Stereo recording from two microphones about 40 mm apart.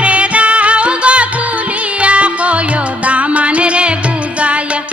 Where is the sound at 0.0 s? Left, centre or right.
Right.